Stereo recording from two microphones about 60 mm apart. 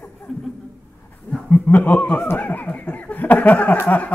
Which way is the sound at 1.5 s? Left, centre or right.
Left.